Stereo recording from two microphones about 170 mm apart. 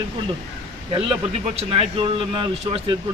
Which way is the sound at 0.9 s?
30° right (ahead or behind).